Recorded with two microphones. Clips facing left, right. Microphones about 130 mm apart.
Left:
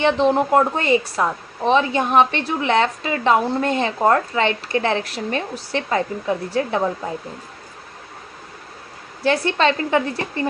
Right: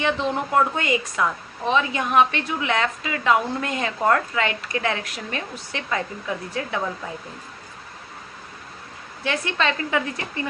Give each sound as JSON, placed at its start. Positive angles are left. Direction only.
{"t": 0.0, "sound": "a woman's voice", "side_deg": 35}
{"t": 9.2, "sound": "a woman's voice", "side_deg": 35}